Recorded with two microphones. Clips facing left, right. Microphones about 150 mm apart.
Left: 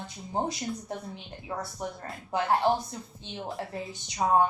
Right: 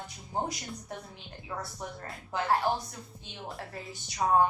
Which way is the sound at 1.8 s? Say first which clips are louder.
Left 5 dB; 20° left (ahead or behind).